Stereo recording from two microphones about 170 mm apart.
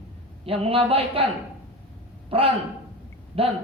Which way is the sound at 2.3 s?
35° right (ahead or behind).